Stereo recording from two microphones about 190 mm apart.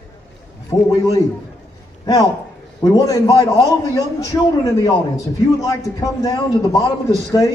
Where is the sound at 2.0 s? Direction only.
20° left (ahead or behind).